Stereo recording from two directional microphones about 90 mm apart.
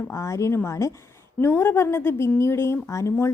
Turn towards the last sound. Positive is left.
turn(degrees=30)  # may be behind; listen again after turning